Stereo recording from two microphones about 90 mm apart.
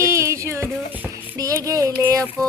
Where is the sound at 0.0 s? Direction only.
35° right (ahead or behind).